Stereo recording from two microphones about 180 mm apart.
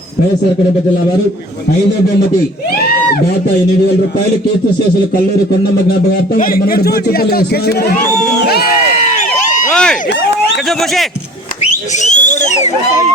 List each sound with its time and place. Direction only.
6.3 s speech: 50° left (ahead or behind)
9.0 s a sound: 45° left (ahead or behind)
9.7 s speech: 5° left (ahead or behind)
11.9 s speech: 40° left (ahead or behind)